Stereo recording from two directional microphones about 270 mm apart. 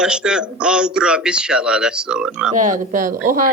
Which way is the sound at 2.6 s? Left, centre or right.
Right.